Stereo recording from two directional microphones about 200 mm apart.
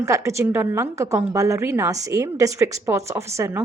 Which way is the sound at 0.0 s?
15° right (ahead or behind).